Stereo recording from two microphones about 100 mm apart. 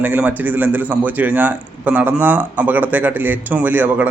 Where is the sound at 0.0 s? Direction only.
15° right (ahead or behind).